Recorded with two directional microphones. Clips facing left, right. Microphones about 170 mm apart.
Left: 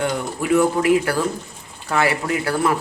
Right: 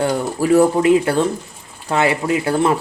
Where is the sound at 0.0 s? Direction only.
35° right (ahead or behind).